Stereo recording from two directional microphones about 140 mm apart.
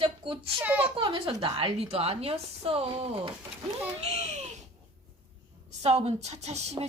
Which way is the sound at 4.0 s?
50° right (ahead or behind).